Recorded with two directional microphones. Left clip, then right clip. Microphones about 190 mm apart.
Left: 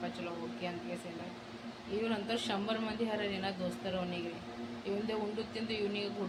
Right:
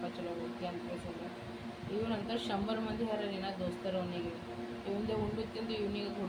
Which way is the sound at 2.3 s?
15° left (ahead or behind).